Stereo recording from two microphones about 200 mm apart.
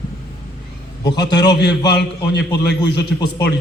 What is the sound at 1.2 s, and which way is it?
Speech, 20° left (ahead or behind).